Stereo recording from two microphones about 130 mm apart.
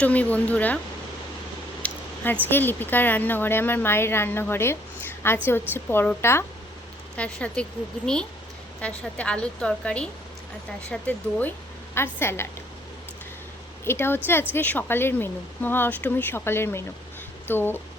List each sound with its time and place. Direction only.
0.0 s speech: 10° left (ahead or behind)
1.8 s a sound: 10° left (ahead or behind)
2.5 s speech: 15° left (ahead or behind)
13.8 s speech: 20° left (ahead or behind)